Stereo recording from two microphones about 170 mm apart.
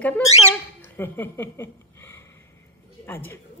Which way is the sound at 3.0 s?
10° left (ahead or behind).